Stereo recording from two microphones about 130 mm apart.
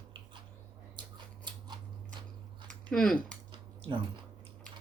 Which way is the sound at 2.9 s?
5° left (ahead or behind).